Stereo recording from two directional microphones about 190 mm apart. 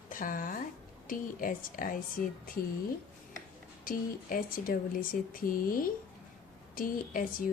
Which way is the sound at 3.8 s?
50° left (ahead or behind).